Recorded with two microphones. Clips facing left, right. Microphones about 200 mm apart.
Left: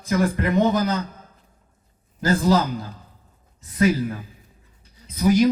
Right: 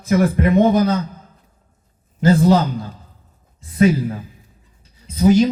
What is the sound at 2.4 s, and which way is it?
Speech, 30° right (ahead or behind).